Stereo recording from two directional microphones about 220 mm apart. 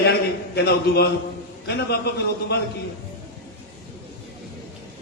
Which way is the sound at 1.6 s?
50° left (ahead or behind).